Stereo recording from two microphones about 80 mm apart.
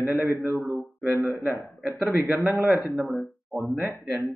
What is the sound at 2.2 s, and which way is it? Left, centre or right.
Speech, right.